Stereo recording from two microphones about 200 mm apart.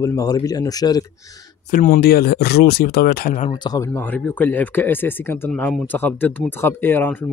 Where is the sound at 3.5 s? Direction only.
20° left (ahead or behind).